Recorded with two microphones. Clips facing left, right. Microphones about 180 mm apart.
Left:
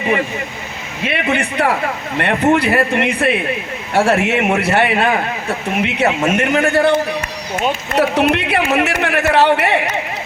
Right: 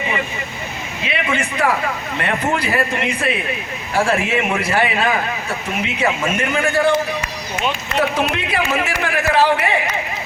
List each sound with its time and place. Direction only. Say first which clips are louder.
1.0 s a man's voice: left 4 dB; 60° left (ahead or behind)